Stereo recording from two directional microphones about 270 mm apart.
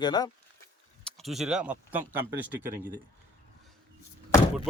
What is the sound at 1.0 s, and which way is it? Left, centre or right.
Speech, centre.